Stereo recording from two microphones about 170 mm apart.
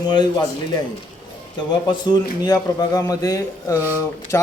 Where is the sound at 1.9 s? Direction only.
25° left (ahead or behind).